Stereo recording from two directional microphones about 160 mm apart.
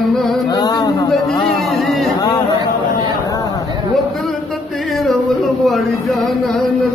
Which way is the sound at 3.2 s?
20° left (ahead or behind).